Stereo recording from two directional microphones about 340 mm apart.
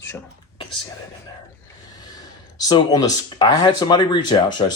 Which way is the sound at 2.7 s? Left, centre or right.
Centre.